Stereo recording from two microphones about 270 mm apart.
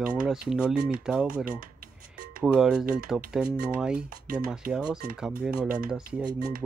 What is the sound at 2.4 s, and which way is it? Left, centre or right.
Speech, centre.